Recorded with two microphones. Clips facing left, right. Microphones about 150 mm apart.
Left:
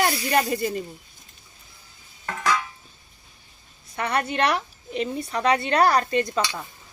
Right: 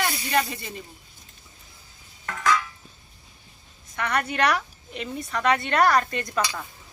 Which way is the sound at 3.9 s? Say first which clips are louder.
Left 2 dB; 30° left (ahead or behind).